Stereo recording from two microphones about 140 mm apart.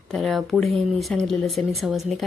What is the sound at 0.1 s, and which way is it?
A woman's voice, centre (ahead or behind).